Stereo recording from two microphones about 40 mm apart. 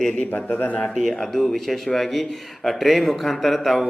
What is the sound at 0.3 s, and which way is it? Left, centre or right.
Speech, left.